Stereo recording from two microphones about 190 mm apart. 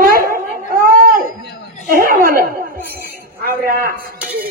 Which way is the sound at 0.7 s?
50° right (ahead or behind).